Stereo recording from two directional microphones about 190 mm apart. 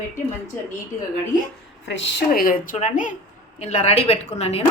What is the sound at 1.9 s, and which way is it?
A woman's voice, 65° left (ahead or behind).